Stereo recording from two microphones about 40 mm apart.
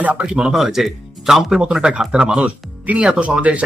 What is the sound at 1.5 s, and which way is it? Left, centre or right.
Speech, centre.